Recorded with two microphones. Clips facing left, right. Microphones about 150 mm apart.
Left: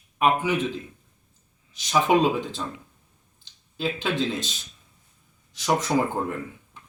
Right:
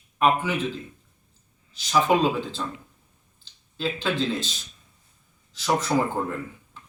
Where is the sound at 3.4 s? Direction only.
15° left (ahead or behind).